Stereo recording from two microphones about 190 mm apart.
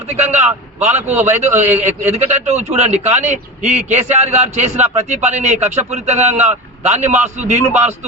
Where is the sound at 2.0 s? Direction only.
35° right (ahead or behind).